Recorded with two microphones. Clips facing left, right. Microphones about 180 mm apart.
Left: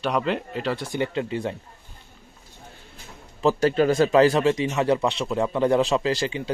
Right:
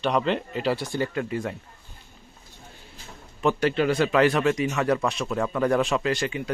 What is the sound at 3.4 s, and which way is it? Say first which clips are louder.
Speech: left 3 dB; 35° left (ahead or behind).